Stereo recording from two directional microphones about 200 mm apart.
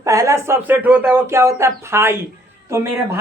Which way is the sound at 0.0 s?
15° right (ahead or behind).